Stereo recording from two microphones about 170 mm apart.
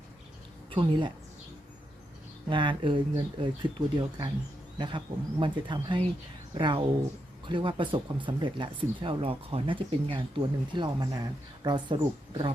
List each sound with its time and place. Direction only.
0.7 s speech: 30° right (ahead or behind)
2.5 s speech: 30° right (ahead or behind)